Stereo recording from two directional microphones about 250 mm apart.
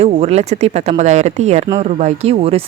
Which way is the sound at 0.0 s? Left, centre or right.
Right.